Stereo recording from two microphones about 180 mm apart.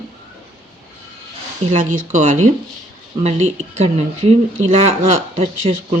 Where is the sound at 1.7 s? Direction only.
45° right (ahead or behind).